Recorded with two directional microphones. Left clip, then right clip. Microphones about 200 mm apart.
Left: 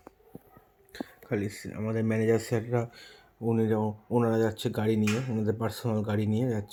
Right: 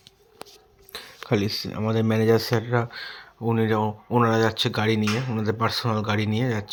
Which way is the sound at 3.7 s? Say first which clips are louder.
Right 5 dB; 25° right (ahead or behind).